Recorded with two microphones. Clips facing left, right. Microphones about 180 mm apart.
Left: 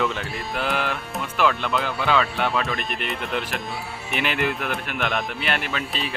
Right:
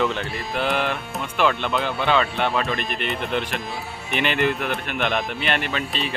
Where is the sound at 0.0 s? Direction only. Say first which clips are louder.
Right 2 dB; centre (ahead or behind).